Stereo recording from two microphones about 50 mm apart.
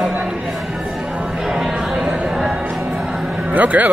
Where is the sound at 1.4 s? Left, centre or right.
Centre.